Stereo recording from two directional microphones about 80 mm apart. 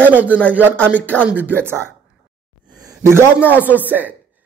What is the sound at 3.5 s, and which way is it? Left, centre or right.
Speech, right.